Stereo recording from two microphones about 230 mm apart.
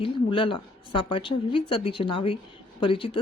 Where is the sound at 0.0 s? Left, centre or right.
Left.